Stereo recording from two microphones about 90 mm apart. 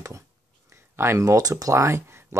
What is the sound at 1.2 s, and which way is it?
Speech, 40° right (ahead or behind).